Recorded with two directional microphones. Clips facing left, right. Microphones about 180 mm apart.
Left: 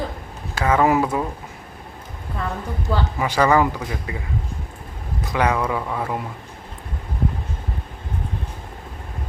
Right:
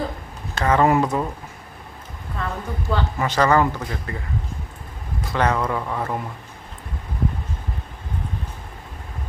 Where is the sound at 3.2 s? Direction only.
10° left (ahead or behind).